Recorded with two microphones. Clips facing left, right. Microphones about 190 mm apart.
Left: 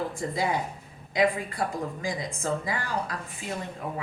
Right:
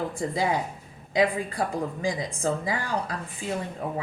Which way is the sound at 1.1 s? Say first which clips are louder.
Right 1 dB; 30° right (ahead or behind).